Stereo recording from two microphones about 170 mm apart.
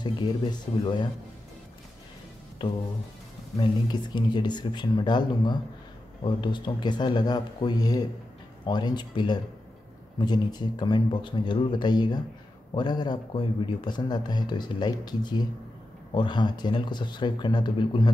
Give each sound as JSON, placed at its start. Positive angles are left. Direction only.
{"t": 0.0, "sound": "speech", "side_deg": 25}
{"t": 2.6, "sound": "speech", "side_deg": 30}
{"t": 3.9, "sound": "speech", "side_deg": 25}